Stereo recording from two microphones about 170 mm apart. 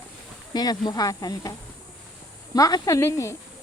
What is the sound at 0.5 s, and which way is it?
Speech, 25° left (ahead or behind).